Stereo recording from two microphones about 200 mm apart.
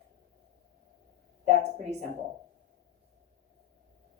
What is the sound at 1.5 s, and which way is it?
Speech, 35° right (ahead or behind).